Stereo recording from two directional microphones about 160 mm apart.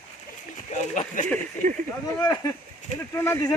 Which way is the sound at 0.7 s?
50° left (ahead or behind).